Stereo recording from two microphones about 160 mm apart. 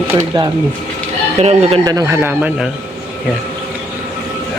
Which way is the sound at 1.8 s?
20° right (ahead or behind).